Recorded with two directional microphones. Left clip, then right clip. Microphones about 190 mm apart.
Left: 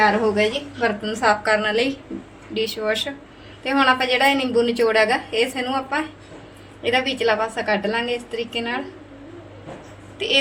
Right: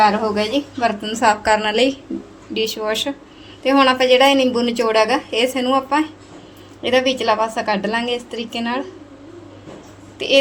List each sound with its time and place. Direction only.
0.0 s a woman's voice: 65° right (ahead or behind)